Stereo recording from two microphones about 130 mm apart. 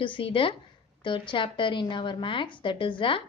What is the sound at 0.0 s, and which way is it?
Speech, 40° left (ahead or behind).